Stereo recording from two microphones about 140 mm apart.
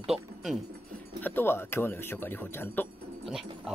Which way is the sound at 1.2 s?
15° left (ahead or behind).